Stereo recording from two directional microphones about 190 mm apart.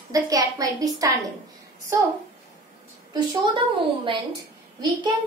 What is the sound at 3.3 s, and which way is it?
Speech, 25° right (ahead or behind).